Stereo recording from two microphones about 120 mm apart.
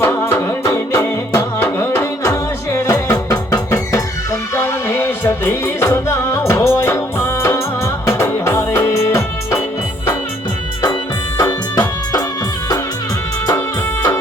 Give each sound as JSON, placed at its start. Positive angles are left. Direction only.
{"t": 0.0, "sound": "music", "side_deg": 20}
{"t": 11.3, "sound": "music", "side_deg": 30}